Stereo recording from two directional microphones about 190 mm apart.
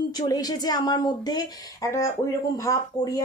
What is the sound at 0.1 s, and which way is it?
A woman's voice, 20° left (ahead or behind).